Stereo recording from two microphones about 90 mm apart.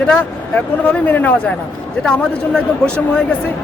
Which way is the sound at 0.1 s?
15° left (ahead or behind).